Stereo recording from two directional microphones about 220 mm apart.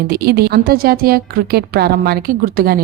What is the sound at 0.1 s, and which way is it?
Speech, 45° right (ahead or behind).